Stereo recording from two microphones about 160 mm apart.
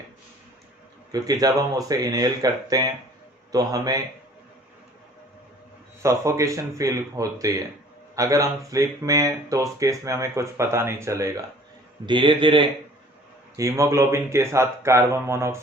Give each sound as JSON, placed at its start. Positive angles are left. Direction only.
{"t": 1.1, "sound": "speech", "side_deg": -25}
{"t": 6.0, "sound": "speech", "side_deg": -20}
{"t": 12.0, "sound": "a man's voice", "side_deg": -30}
{"t": 13.6, "sound": "speech", "side_deg": -20}